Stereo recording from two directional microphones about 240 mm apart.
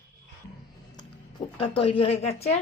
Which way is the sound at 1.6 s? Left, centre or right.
Left.